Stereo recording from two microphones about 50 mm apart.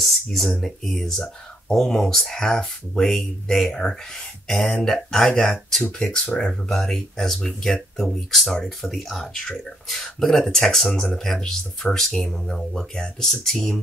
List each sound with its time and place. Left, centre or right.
0.0 s speech: centre
6.2 s speech: centre
6.7 s speech: centre
9.2 s speech: centre